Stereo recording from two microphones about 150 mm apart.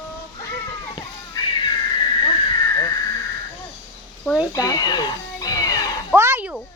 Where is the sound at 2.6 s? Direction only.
20° left (ahead or behind).